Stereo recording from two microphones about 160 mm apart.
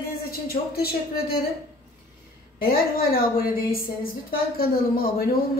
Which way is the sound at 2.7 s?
70° left (ahead or behind).